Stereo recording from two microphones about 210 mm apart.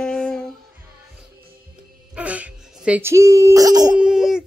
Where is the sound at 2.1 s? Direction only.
5° right (ahead or behind).